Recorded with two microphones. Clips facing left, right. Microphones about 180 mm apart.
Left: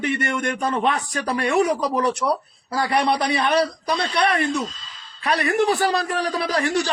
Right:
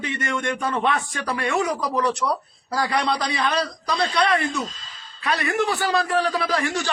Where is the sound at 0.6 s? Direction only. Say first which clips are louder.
Left 2 dB; 35° left (ahead or behind).